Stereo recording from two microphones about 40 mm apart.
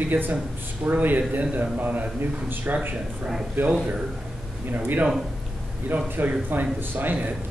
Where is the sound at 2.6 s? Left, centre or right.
Right.